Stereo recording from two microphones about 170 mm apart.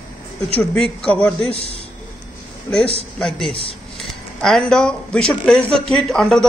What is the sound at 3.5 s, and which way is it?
Speech, 35° left (ahead or behind).